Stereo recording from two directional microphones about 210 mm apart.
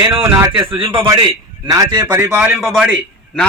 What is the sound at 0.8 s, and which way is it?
A man's voice, 25° right (ahead or behind).